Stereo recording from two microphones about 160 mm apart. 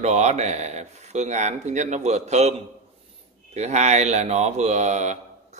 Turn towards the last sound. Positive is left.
turn(degrees=-45)  # may be behind; listen again after turning